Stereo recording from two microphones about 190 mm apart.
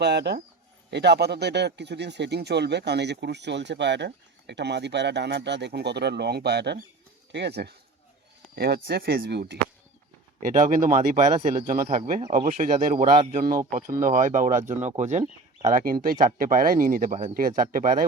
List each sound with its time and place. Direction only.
0.0 s speech: 60° right (ahead or behind)
10.4 s speech: 45° right (ahead or behind)